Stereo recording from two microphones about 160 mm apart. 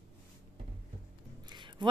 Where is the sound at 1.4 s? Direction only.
30° right (ahead or behind).